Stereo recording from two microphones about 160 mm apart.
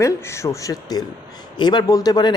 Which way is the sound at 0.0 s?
20° left (ahead or behind).